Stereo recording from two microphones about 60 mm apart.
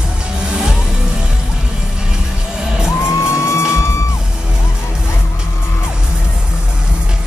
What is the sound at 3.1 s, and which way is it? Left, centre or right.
Music, left.